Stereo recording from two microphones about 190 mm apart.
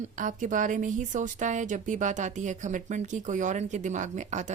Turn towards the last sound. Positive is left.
turn(degrees=-40)  # may be behind; listen again after turning